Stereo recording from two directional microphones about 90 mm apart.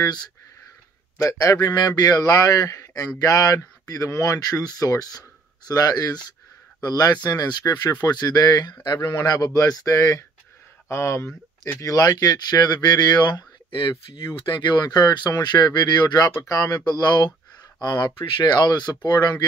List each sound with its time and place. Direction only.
0.0 s speech: 50° left (ahead or behind)
1.1 s speech: 35° left (ahead or behind)
11.8 s speech: 45° left (ahead or behind)
13.7 s speech: 70° left (ahead or behind); by 19.4 s 50° left (ahead or behind)